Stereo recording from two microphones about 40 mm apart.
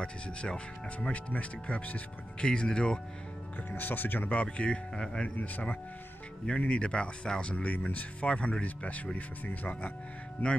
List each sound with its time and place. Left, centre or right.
0.0 s speech: left
2.4 s speech: left
3.7 s speech: left
4.3 s speech: left
7.5 s speech: left
8.3 s speech: left
8.6 s speech: left